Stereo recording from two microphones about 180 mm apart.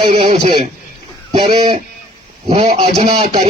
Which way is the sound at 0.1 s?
30° right (ahead or behind).